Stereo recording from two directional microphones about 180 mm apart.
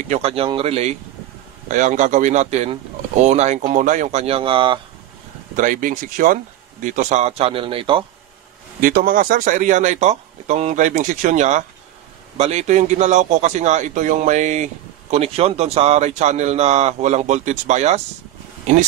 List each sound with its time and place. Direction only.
0.1 s a man's voice: 35° right (ahead or behind)
5.6 s speech: 45° right (ahead or behind); by 8.0 s 30° right (ahead or behind)
8.8 s a man's voice: 50° right (ahead or behind)